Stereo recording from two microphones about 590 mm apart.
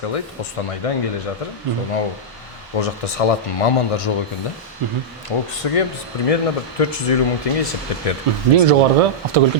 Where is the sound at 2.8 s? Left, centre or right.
Left.